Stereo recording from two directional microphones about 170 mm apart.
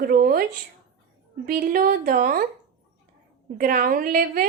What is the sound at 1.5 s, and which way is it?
Speech, 55° right (ahead or behind).